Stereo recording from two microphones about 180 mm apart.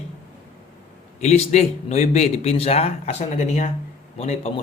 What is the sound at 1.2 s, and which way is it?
A man's voice, 40° left (ahead or behind).